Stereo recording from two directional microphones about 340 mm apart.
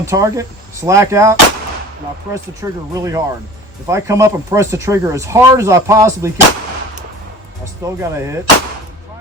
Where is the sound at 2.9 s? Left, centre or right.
Centre.